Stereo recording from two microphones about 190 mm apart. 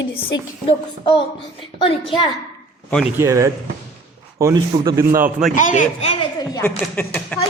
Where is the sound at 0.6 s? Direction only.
25° left (ahead or behind).